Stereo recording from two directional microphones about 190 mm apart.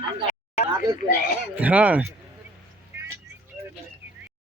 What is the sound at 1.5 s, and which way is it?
Speech, 10° right (ahead or behind).